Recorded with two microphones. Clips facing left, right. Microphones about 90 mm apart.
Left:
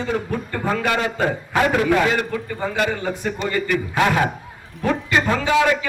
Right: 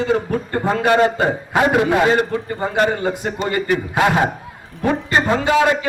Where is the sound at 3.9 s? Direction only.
25° right (ahead or behind).